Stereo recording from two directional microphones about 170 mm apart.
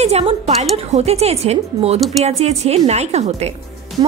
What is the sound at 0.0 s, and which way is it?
A woman's voice, 40° right (ahead or behind).